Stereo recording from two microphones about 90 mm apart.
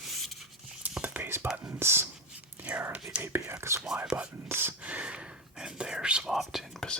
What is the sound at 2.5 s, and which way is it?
Whispering, 15° right (ahead or behind).